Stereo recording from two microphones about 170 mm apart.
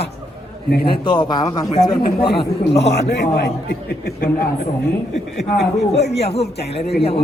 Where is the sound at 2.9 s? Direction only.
85° left.